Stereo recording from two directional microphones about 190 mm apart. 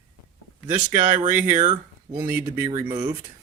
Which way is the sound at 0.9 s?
40° right (ahead or behind).